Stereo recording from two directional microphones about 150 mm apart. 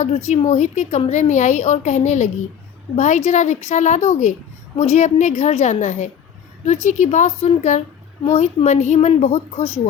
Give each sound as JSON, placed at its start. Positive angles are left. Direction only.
{"t": 0.3, "sound": "a woman's voice", "side_deg": 50}